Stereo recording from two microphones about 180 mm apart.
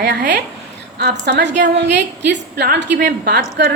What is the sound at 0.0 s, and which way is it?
A woman's voice, 70° right (ahead or behind).